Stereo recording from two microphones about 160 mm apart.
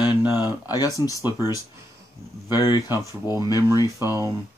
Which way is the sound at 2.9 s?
15° right (ahead or behind).